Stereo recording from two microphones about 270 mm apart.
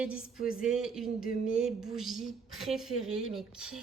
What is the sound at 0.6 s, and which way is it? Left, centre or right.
A woman's voice, centre.